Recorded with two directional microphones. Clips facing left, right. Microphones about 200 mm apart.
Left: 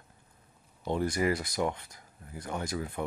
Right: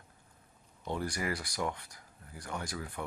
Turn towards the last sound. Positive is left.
turn(degrees=25)  # may be behind; listen again after turning